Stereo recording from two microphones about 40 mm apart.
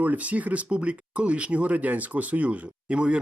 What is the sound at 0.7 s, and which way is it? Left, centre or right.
Speech, right.